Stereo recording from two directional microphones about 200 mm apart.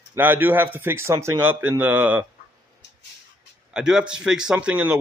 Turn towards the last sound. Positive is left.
turn(degrees=-5)  # may be behind; listen again after turning